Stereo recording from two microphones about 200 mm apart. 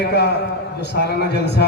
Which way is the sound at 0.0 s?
55° left (ahead or behind).